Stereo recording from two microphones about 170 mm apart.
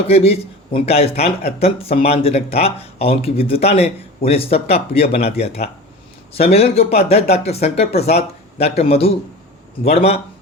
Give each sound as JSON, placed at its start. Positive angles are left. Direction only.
{"t": 0.1, "sound": "speech", "side_deg": 35}